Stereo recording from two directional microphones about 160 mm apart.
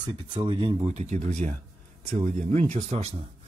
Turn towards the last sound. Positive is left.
turn(degrees=-40)  # may be behind; listen again after turning